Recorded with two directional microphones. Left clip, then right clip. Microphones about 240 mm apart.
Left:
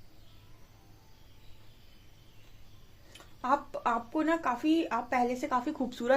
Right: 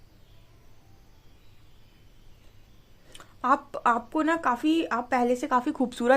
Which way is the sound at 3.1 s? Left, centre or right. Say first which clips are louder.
Right 5 dB; right.